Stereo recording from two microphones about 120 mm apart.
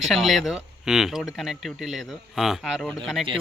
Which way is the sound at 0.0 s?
Centre (ahead or behind).